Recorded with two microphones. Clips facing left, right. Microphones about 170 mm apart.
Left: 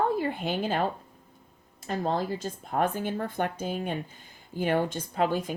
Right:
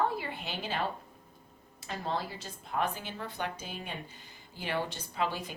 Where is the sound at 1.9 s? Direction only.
45° left (ahead or behind).